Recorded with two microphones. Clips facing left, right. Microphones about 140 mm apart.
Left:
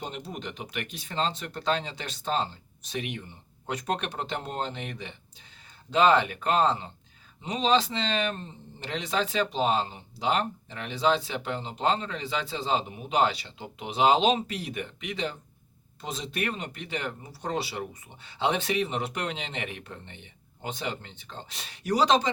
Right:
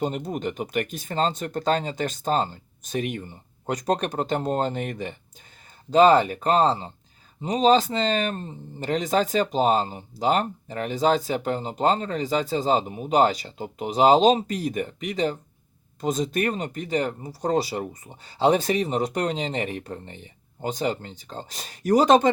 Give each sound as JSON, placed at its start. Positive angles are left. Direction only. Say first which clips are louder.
{"t": 0.0, "sound": "speech", "louder": "right 10 dB", "side_deg": -45}